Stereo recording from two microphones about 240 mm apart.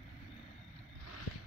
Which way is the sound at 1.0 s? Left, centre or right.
Left.